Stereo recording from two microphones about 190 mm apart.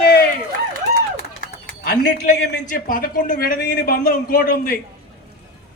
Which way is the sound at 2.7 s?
45° left (ahead or behind).